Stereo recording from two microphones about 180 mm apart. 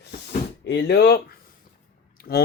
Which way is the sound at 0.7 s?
65° left (ahead or behind).